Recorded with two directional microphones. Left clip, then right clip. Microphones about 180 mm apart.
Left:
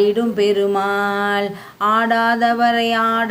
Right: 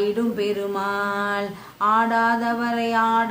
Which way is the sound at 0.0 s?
15° left (ahead or behind).